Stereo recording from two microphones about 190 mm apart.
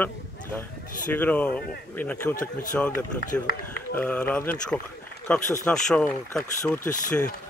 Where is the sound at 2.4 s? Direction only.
45° left (ahead or behind).